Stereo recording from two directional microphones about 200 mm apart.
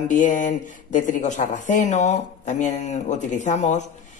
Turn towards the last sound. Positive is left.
turn(degrees=35)  # may be behind; listen again after turning